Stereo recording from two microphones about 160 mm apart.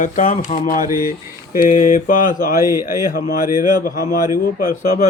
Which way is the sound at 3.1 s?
60° left (ahead or behind).